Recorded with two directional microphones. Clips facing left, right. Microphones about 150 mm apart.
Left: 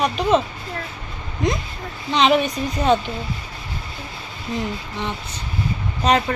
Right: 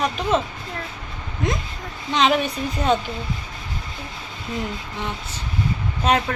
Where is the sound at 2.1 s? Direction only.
Centre (ahead or behind).